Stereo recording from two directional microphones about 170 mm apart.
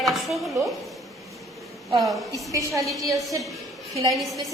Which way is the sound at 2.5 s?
20° right (ahead or behind).